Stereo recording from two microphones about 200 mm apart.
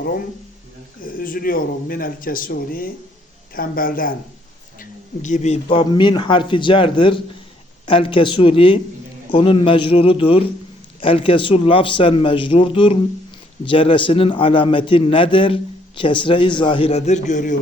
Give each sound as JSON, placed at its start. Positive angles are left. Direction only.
{"t": 1.0, "sound": "speech", "side_deg": 45}
{"t": 5.8, "sound": "a man's voice", "side_deg": 25}